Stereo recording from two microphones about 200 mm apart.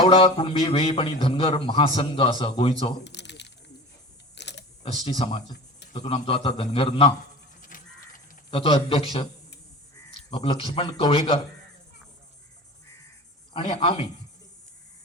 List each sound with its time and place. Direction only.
0.0 s a man's voice: 25° left (ahead or behind)
3.0 s squish: 60° left (ahead or behind)
4.4 s typing: 60° left (ahead or behind)
5.0 s a man's voice: 25° left (ahead or behind)
7.7 s a sound: 45° left (ahead or behind)
8.4 s a man's voice: 25° left (ahead or behind)
10.2 s a man's voice: 25° left (ahead or behind)
13.5 s a man's voice: 25° left (ahead or behind)